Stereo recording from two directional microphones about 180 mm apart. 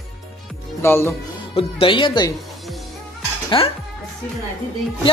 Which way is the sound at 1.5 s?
30° left (ahead or behind).